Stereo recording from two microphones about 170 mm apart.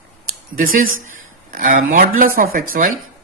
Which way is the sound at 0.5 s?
50° right (ahead or behind).